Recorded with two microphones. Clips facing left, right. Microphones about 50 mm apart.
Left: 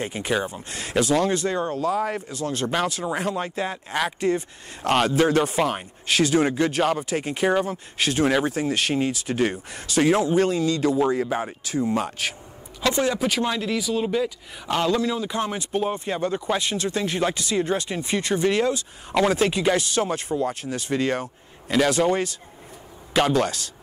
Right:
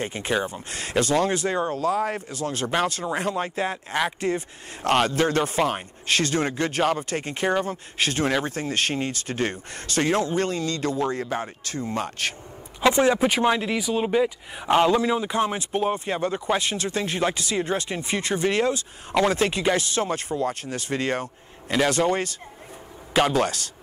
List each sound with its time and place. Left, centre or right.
0.0 s speech: centre
12.8 s speech: right
15.3 s speech: centre